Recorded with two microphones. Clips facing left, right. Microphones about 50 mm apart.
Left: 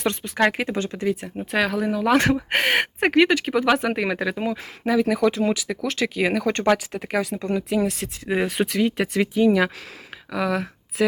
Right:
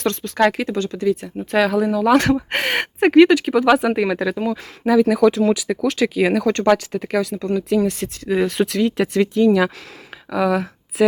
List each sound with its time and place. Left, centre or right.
0.0 s speech: centre
1.4 s speech: centre
6.4 s speech: centre
7.9 s speech: centre
8.2 s speech: left
8.4 s speech: centre